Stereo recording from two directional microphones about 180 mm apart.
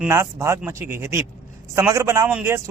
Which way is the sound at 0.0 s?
15° right (ahead or behind).